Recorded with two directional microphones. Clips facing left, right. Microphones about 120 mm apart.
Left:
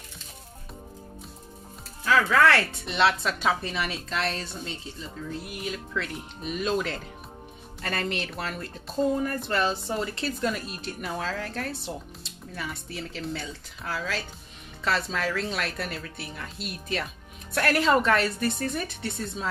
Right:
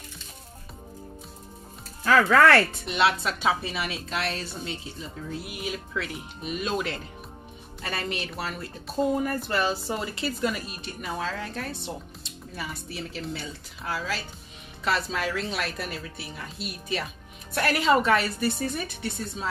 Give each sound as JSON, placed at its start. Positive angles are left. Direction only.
{"t": 2.0, "sound": "speech", "side_deg": -50}
{"t": 2.9, "sound": "a woman's voice", "side_deg": -5}